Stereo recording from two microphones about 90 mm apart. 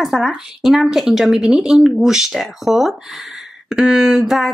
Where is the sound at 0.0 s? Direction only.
5° right (ahead or behind).